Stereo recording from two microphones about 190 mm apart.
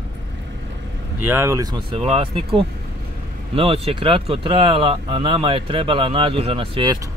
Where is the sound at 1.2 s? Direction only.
10° right (ahead or behind).